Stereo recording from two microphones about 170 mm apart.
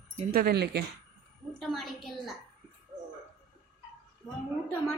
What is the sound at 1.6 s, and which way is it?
Speech, centre (ahead or behind).